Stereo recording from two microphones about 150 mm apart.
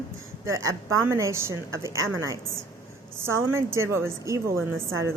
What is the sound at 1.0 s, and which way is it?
A woman's voice, 20° right (ahead or behind).